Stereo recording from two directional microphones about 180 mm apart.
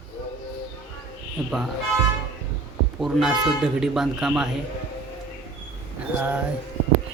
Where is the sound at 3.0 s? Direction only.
Centre (ahead or behind).